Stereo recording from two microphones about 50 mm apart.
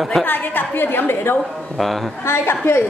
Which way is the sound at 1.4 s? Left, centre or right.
Centre.